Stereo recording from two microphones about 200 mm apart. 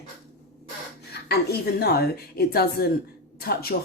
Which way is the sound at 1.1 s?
55° left (ahead or behind).